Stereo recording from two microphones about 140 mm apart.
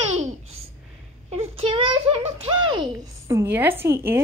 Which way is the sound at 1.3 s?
45° right (ahead or behind).